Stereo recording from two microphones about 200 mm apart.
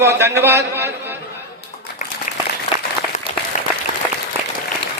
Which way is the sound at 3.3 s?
25° left (ahead or behind).